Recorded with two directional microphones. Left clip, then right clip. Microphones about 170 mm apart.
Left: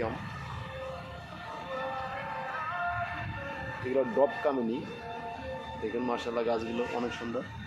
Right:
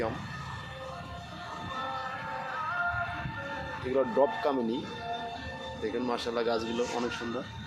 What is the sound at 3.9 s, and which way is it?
Speech, 5° left (ahead or behind).